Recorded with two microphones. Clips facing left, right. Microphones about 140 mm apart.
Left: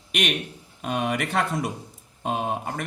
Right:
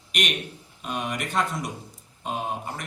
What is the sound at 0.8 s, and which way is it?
Speech, 65° left (ahead or behind).